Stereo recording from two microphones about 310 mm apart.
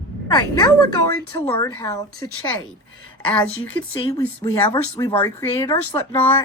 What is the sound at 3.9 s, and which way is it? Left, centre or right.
Speech, centre.